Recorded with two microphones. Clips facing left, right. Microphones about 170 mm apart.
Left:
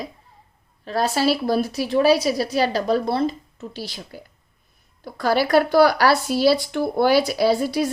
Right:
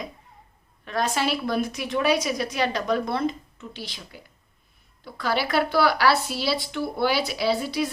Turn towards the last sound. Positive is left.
turn(degrees=40)  # may be behind; listen again after turning